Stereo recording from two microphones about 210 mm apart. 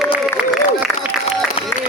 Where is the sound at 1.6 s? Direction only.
25° left (ahead or behind).